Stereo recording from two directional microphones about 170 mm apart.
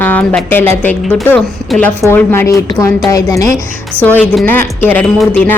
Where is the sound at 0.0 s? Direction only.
10° left (ahead or behind).